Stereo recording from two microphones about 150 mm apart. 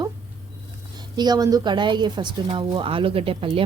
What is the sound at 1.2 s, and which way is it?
Speech, 25° right (ahead or behind).